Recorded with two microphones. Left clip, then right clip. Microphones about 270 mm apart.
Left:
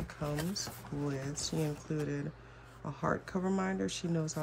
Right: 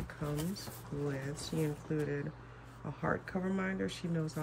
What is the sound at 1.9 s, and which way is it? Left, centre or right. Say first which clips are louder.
Speech: right 1 dB; centre.